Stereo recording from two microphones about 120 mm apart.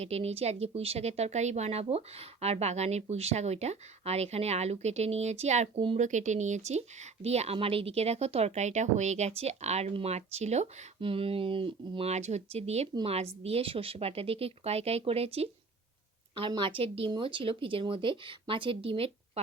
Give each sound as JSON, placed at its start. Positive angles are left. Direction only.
{"t": 0.0, "sound": "speech", "side_deg": -60}
{"t": 6.0, "sound": "speech", "side_deg": -90}
{"t": 11.0, "sound": "speech", "side_deg": -50}
{"t": 12.1, "sound": "speech", "side_deg": -70}
{"t": 16.5, "sound": "speech", "side_deg": -45}